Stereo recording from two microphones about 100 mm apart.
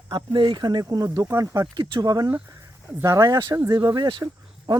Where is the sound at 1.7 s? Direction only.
45° right (ahead or behind).